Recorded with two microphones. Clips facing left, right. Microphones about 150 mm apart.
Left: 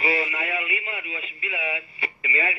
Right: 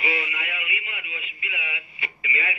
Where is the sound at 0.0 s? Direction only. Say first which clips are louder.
Left 4 dB; 35° left (ahead or behind).